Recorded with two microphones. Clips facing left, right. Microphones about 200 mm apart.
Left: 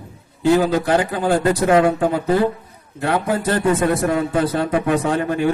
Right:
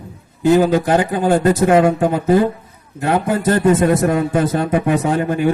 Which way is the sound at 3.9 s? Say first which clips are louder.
Right 3 dB; 45° right (ahead or behind).